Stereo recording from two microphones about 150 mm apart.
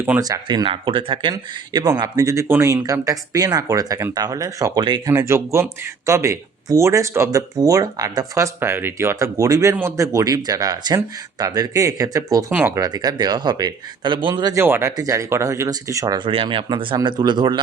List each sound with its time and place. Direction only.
0.2 s speech: 25° right (ahead or behind)
12.5 s speech: 10° right (ahead or behind)
12.7 s speech: 25° right (ahead or behind)
14.6 s speech: 15° right (ahead or behind)